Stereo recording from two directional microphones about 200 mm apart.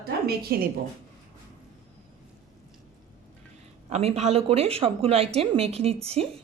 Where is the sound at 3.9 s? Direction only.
30° right (ahead or behind).